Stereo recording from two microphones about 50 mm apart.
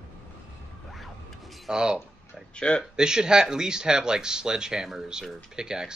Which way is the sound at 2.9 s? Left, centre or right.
Centre.